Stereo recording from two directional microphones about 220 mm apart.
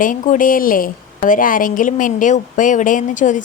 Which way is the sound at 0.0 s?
35° left (ahead or behind).